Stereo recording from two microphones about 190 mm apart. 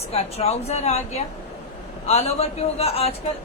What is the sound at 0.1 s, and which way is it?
A man's voice, 35° left (ahead or behind).